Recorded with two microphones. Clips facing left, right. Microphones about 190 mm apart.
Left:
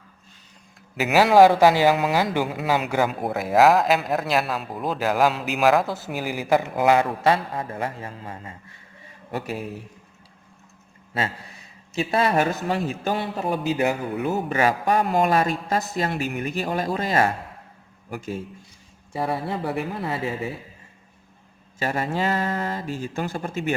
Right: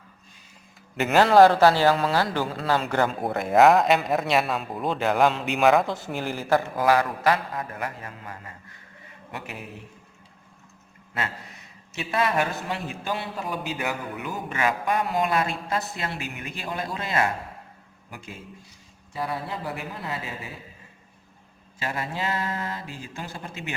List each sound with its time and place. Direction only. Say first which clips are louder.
0.9 s a man's voice: left 1 dB; 5° left (ahead or behind); by 9.6 s 35° left (ahead or behind)
11.9 s a man's voice: left 4 dB; 40° left (ahead or behind)
15.0 s a man's voice: left 5 dB; 45° left (ahead or behind)
19.5 s speech: left 6 dB; 60° left (ahead or behind)
21.8 s speech: left 6 dB; 45° left (ahead or behind)